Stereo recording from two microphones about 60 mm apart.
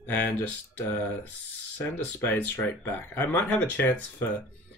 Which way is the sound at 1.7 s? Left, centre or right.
Left.